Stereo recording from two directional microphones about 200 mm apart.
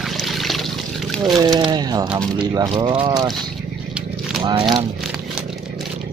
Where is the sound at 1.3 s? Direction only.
20° right (ahead or behind).